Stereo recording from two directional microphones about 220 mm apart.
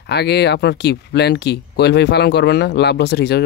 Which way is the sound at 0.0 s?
50° left (ahead or behind).